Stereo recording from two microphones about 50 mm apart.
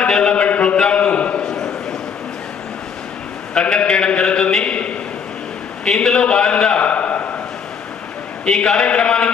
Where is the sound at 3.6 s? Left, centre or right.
Centre.